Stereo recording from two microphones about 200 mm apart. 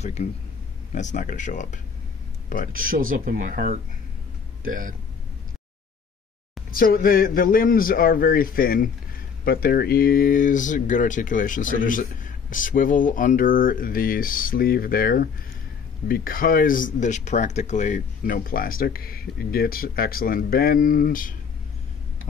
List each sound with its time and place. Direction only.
0.0 s speech: 35° left (ahead or behind)
2.7 s speech: 45° right (ahead or behind)
6.7 s speech: 45° left (ahead or behind)